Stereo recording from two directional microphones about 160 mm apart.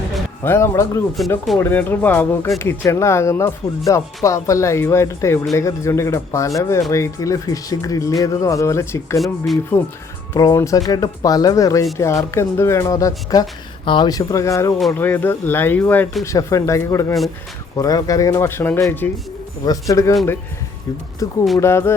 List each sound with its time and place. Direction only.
0.4 s speech: 15° left (ahead or behind)
10.3 s speech: 20° left (ahead or behind)
21.2 s speech: 20° left (ahead or behind)